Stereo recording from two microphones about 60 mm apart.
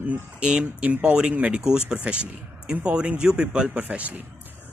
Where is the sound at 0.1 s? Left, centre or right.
Centre.